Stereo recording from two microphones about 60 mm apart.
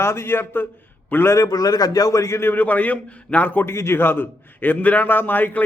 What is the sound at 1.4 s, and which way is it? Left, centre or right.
A man's voice, left.